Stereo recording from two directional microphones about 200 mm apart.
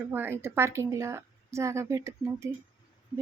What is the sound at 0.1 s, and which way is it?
A woman's voice, 10° right (ahead or behind).